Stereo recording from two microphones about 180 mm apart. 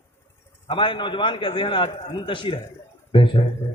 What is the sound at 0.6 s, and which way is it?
A woman's voice, 30° left (ahead or behind).